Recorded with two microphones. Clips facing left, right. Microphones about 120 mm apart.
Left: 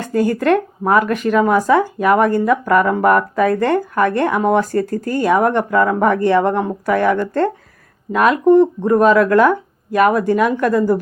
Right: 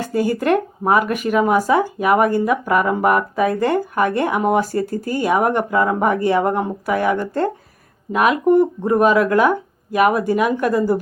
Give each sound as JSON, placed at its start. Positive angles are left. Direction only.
{"t": 0.0, "sound": "speech", "side_deg": -15}